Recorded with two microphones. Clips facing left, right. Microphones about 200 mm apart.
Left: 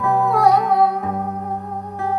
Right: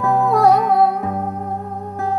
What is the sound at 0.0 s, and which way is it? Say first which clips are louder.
Music: right 2 dB; 40° right (ahead or behind).